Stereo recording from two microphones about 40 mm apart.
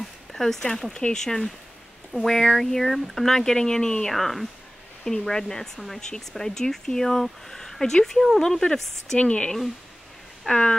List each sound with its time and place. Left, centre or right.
0.3 s a sound: centre
0.9 s speech: centre
4.1 s speech: centre
9.2 s speech: left
10.5 s speech: centre